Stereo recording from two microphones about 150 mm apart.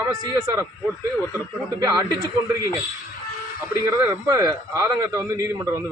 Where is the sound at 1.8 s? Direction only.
25° right (ahead or behind).